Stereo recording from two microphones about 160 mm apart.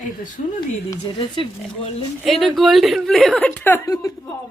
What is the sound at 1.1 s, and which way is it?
Speech, 35° left (ahead or behind).